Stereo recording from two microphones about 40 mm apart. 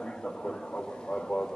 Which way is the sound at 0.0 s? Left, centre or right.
Centre.